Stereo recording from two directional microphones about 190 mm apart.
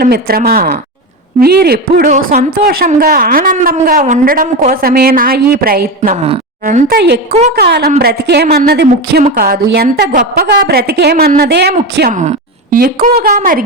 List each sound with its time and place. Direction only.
0.0 s speech: 55° right (ahead or behind)
6.2 s speech: 35° right (ahead or behind)
6.8 s a woman's voice: 55° right (ahead or behind)
9.2 s a woman's voice: 50° right (ahead or behind)
12.7 s speech: 50° right (ahead or behind)